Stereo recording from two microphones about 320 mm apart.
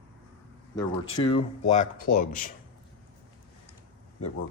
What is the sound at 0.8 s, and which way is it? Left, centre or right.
Speech, centre.